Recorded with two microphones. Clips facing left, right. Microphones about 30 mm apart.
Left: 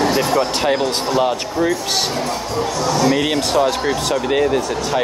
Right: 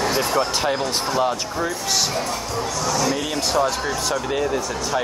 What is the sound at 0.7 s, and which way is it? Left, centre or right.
Speech, left.